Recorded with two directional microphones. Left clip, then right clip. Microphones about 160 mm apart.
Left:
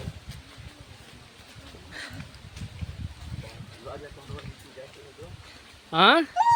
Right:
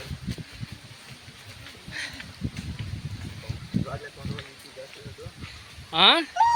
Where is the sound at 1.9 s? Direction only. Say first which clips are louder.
Right 5 dB; 35° left (ahead or behind).